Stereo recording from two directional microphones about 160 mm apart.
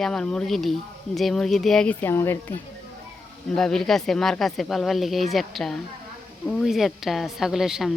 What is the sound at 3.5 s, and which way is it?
Speech, 5° left (ahead or behind).